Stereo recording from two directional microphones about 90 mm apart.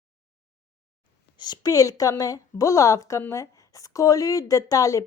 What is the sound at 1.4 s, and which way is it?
Speech, 45° left (ahead or behind).